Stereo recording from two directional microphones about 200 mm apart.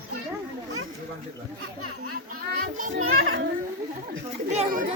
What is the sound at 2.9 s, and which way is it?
Speech, 90° right.